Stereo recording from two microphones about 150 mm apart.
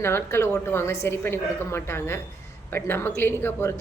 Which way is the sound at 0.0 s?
15° left (ahead or behind).